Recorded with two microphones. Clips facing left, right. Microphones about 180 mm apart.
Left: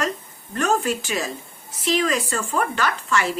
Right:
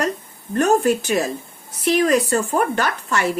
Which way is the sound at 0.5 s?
55° right (ahead or behind).